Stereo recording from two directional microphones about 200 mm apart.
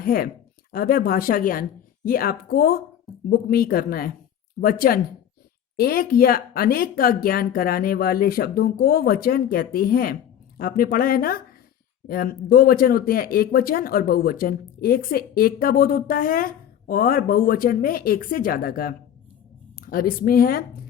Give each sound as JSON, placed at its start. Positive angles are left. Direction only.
{"t": 0.0, "sound": "speech", "side_deg": 50}